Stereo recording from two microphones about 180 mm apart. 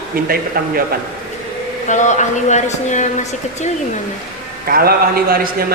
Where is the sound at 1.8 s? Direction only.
40° left (ahead or behind).